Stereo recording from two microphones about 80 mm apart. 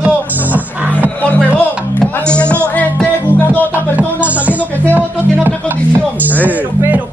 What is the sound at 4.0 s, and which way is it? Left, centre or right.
Music, centre.